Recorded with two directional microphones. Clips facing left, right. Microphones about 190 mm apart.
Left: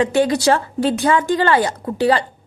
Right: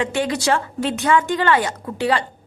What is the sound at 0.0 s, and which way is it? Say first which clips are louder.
Speech: left 6 dB; 40° left (ahead or behind).